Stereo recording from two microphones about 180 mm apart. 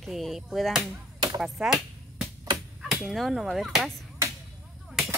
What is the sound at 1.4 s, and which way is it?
Music, centre (ahead or behind).